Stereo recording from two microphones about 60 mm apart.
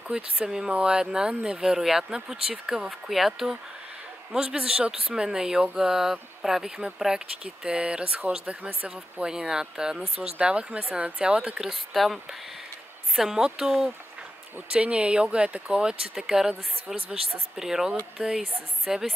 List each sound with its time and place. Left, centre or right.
0.1 s speech: centre
11.6 s speech: centre
14.7 s speech: centre